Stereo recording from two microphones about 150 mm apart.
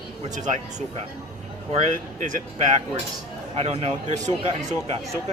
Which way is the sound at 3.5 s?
45° right (ahead or behind).